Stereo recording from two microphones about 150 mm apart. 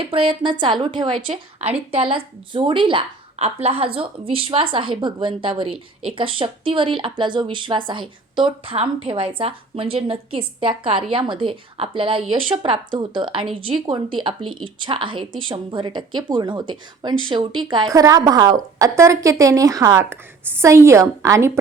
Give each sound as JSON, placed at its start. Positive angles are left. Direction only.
{"t": 0.0, "sound": "a woman's voice", "side_deg": -35}